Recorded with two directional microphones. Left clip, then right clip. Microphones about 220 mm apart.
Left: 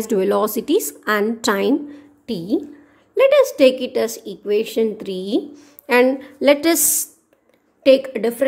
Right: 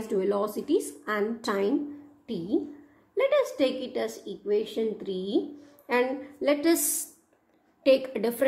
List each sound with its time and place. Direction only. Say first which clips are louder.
0.1 s a woman's voice: left 9 dB; 40° left (ahead or behind)
7.8 s a woman's voice: left 9 dB; 25° left (ahead or behind)